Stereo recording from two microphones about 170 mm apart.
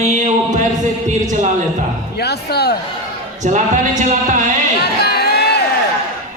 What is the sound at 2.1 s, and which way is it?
Speech, 70° left (ahead or behind).